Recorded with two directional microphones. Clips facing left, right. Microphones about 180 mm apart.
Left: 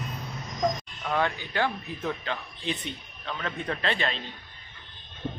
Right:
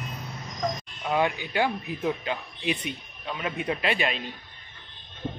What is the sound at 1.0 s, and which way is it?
Speech, 15° right (ahead or behind).